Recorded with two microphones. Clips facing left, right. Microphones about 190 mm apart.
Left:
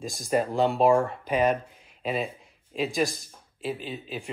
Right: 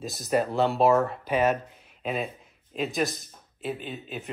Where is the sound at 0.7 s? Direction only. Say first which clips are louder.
Left 1 dB; 5° right (ahead or behind).